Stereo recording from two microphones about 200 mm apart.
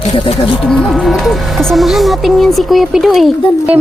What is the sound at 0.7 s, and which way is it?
Speech, centre (ahead or behind).